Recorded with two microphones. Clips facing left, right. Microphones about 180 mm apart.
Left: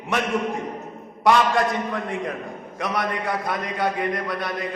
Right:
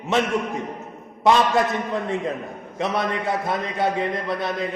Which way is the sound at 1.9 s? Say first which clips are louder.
Right 3 dB; 25° right (ahead or behind).